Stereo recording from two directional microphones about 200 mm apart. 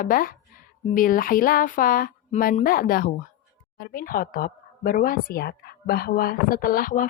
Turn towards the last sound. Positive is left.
turn(degrees=45)  # may be behind; listen again after turning